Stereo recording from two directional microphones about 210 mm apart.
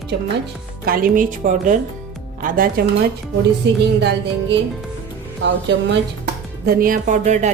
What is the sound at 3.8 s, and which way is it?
Music, 55° right (ahead or behind).